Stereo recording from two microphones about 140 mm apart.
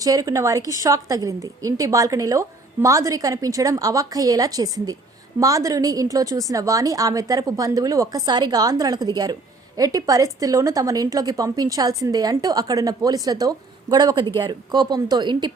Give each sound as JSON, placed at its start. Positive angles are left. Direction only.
{"t": 0.0, "sound": "a woman's voice", "side_deg": -25}